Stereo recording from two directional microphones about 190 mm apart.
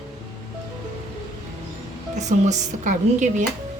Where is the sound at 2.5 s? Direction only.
40° right (ahead or behind).